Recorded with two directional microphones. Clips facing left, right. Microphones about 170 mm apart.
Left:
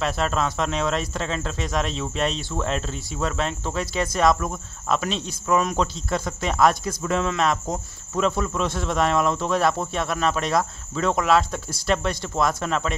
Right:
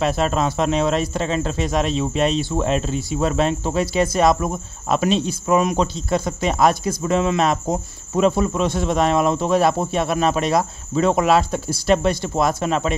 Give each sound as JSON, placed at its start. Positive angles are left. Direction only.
{"t": 0.0, "sound": "speech", "side_deg": -10}
{"t": 7.6, "sound": "cricket", "side_deg": -25}
{"t": 8.4, "sound": "speech", "side_deg": -5}